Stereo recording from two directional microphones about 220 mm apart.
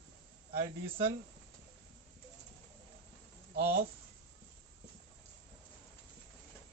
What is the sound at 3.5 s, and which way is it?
Speech, 45° right (ahead or behind).